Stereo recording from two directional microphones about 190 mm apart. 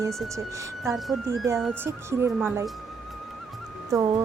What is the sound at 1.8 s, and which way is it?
Speech, 15° right (ahead or behind).